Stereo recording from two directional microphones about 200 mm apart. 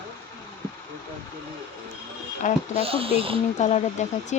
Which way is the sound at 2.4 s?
40° left (ahead or behind).